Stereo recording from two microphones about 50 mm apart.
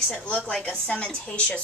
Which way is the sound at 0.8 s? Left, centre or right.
Left.